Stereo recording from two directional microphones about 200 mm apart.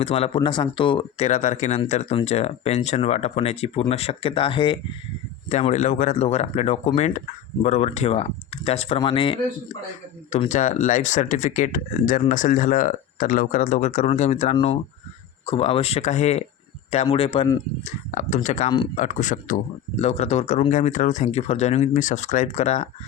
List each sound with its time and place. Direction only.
0.0 s speech: 30° left (ahead or behind)
5.5 s speech: 35° left (ahead or behind)
17.8 s speech: 40° left (ahead or behind)